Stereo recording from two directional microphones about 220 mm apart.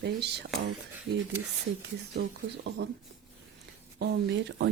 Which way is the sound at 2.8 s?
50° right (ahead or behind).